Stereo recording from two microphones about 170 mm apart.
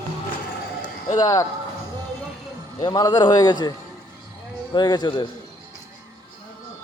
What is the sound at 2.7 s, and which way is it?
Speech, 25° left (ahead or behind).